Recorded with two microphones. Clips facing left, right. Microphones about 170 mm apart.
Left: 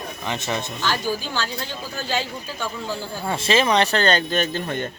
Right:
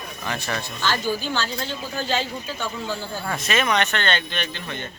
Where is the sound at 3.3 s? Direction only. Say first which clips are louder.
Left 4 dB; 30° left (ahead or behind); by 4.9 s 45° left (ahead or behind).